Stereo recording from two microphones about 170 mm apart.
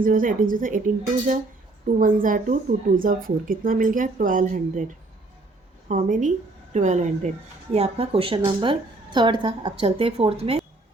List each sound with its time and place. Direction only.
0.0 s speech: 55° right (ahead or behind)
2.0 s speech: 55° right (ahead or behind)
5.9 s a woman's voice: 45° right (ahead or behind)